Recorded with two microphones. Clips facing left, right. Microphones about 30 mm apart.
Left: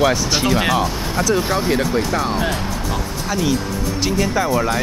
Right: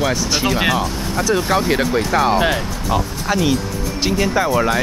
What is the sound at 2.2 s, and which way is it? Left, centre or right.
Speech, right.